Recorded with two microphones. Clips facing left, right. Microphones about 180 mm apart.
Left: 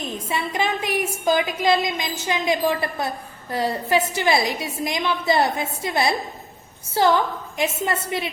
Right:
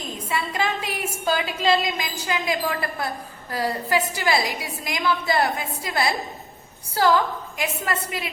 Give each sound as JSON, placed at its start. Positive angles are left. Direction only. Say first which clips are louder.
{"t": 0.3, "sound": "a woman's voice", "louder": "left 1 dB", "side_deg": 20}